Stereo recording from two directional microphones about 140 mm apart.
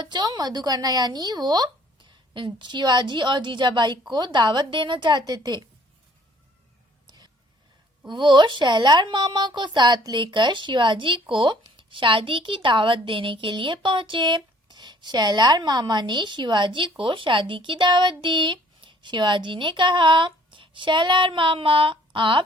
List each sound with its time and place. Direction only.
0.0 s speech: 30° right (ahead or behind)
8.1 s speech: 35° right (ahead or behind)